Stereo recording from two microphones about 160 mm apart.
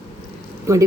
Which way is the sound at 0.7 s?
20° right (ahead or behind).